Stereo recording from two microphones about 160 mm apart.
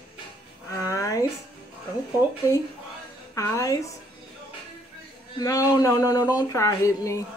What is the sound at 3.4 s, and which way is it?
Speech, 20° left (ahead or behind).